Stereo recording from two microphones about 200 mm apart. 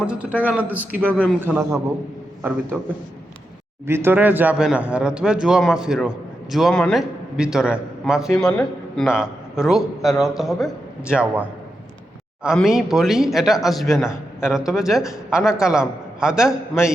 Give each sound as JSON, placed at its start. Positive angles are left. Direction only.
{"t": 0.0, "sound": "a man's voice", "side_deg": -5}
{"t": 3.8, "sound": "a man's voice", "side_deg": -10}